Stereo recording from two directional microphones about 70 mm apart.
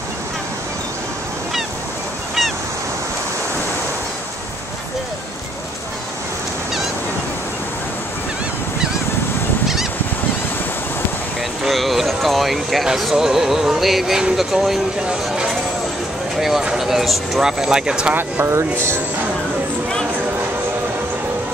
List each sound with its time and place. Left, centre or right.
11.6 s speech: centre
18.1 s speech: right